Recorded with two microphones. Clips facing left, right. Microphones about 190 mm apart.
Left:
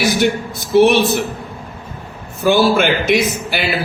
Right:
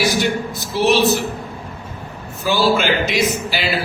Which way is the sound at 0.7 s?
55° left (ahead or behind).